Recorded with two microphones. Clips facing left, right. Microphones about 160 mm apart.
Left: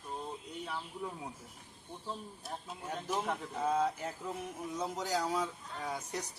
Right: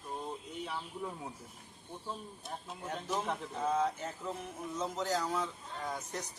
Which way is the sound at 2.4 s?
10° left (ahead or behind).